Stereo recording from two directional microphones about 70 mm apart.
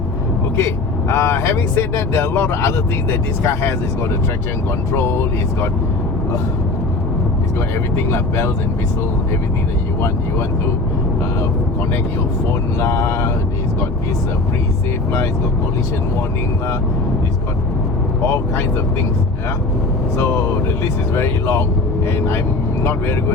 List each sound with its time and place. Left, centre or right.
0.5 s speech: left
4.9 s speech: left
12.8 s speech: left
21.2 s speech: left
22.8 s speech: left